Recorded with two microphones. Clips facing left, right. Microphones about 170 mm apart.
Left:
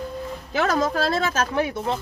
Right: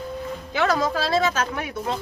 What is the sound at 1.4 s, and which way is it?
Speech, 30° left (ahead or behind).